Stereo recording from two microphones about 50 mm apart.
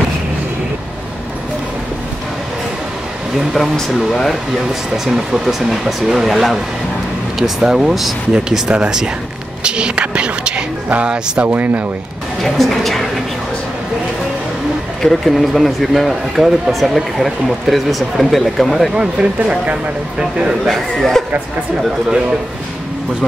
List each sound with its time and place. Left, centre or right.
3.5 s speech: centre
4.9 s speech: centre
9.6 s a sound: centre
11.4 s speech: right
12.4 s a sound: centre
15.0 s speech: centre
18.9 s speech: right
20.6 s speech: centre